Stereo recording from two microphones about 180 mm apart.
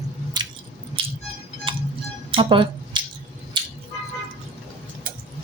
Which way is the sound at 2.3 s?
30° right (ahead or behind).